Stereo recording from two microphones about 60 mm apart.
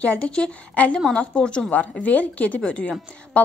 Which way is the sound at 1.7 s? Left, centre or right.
Left.